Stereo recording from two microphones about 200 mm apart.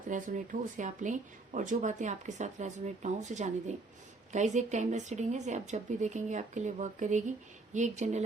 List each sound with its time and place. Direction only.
0.1 s speech: 40° right (ahead or behind)